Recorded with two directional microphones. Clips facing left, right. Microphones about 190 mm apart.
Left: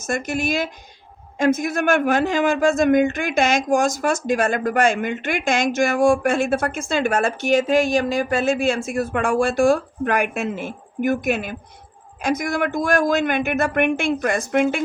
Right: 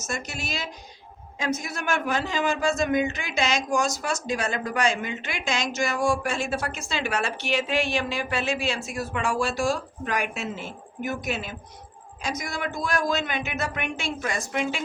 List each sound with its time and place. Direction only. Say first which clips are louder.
0.1 s a man's voice: left 10 dB; 55° left (ahead or behind)